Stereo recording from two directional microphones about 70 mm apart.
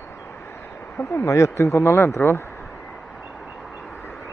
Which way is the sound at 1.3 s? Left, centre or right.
Left.